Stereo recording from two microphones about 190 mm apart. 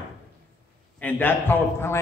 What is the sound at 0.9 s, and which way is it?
A man's voice, 10° left (ahead or behind).